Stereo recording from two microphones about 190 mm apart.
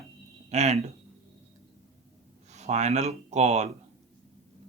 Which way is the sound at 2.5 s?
35° right (ahead or behind).